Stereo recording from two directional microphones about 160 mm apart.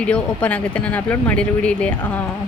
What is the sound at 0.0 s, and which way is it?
Speech, 10° left (ahead or behind).